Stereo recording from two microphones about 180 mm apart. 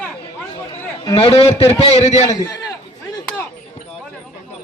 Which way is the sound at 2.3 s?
20° left (ahead or behind).